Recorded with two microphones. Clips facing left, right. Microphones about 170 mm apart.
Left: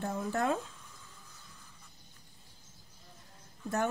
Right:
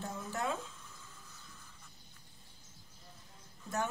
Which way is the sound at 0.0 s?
60° left (ahead or behind).